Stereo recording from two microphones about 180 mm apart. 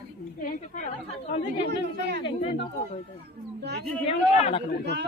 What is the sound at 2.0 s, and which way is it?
Speech, 70° right (ahead or behind).